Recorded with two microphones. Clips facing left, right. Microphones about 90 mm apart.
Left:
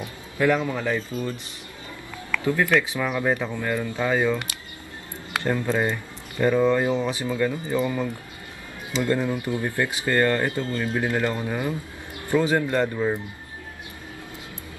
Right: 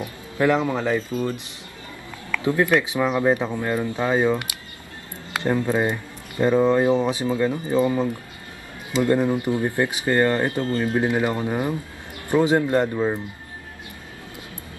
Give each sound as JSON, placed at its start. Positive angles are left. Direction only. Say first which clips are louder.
{"t": 0.0, "sound": "speech", "louder": "right 2 dB", "side_deg": -20}
{"t": 2.4, "sound": "speech", "louder": "right 2 dB", "side_deg": -20}